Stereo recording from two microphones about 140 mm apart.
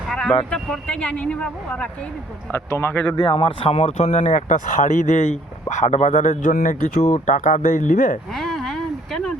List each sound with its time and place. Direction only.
0.1 s vehicle: 5° left (ahead or behind)
0.5 s speech: 5° left (ahead or behind)
3.2 s speech: 40° left (ahead or behind)
6.4 s speech: 80° left
7.1 s speech: 65° left (ahead or behind)
8.3 s a sound: centre (ahead or behind)